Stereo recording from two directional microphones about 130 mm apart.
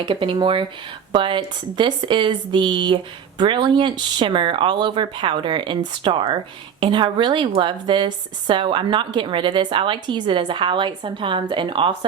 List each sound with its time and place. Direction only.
0.0 s speech: 40° right (ahead or behind)